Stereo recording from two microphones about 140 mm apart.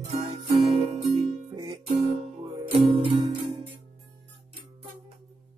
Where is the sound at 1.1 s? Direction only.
30° right (ahead or behind).